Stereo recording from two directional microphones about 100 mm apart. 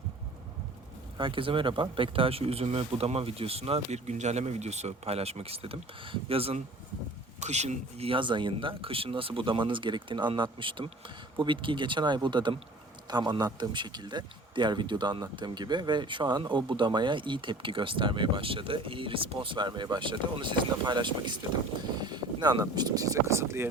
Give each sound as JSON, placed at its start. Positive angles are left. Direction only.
{"t": 1.2, "sound": "speech", "side_deg": -60}
{"t": 7.6, "sound": "a man's voice", "side_deg": -85}
{"t": 21.9, "sound": "boat", "side_deg": -45}
{"t": 22.7, "sound": "speech", "side_deg": -40}